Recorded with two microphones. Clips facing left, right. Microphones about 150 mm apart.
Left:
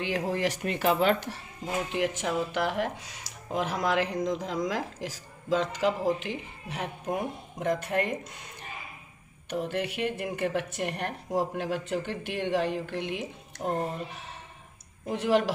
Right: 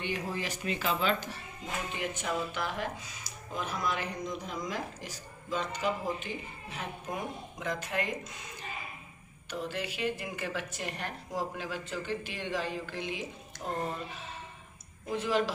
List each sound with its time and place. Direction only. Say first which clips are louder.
0.0 s speech: left 7 dB; 80° left; by 1.3 s 65° left (ahead or behind)
1.9 s speech: left 5 dB; 80° left; by 8.3 s 55° left (ahead or behind)
9.5 s speech: left 6 dB; 60° left (ahead or behind)
15.1 s speech: left 5 dB; 70° left (ahead or behind)